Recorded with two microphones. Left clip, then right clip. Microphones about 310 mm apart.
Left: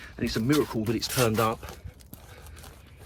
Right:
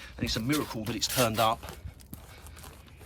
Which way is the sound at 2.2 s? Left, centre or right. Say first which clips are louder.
Left 2 dB; centre.